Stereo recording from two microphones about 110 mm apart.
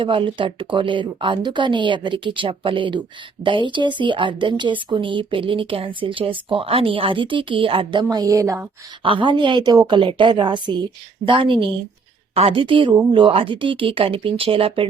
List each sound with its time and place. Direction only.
0.0 s a woman's voice: 50° right (ahead or behind)
8.1 s speech: 35° right (ahead or behind)
9.0 s a woman's voice: 50° right (ahead or behind)
12.3 s a woman's voice: 60° right (ahead or behind)